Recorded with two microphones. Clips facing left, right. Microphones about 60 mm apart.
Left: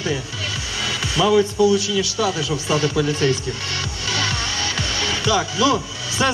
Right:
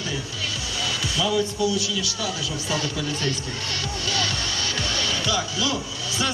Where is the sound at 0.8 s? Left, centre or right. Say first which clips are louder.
Left 5 dB; left.